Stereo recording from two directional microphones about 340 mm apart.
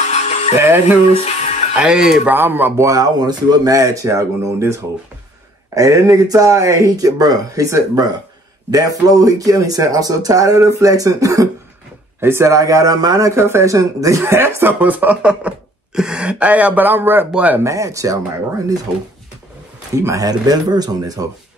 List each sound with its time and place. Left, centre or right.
0.6 s speech: centre
1.1 s music: centre
1.8 s speech: centre
20.0 s speech: centre